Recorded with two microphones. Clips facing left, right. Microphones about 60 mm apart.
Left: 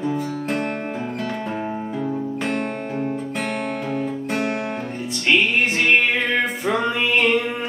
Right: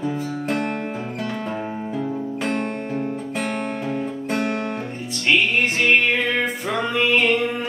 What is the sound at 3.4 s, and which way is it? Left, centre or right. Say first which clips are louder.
Music: right 2 dB; centre.